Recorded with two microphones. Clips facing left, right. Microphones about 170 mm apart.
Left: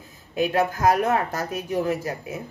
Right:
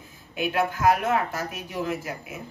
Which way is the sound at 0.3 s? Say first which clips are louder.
Left 3 dB; 40° left (ahead or behind).